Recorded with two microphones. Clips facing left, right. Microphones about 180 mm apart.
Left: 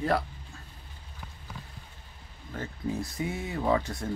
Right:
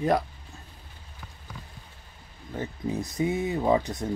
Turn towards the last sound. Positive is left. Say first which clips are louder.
# right 3 dB
turn(degrees=-20)  # may be behind; listen again after turning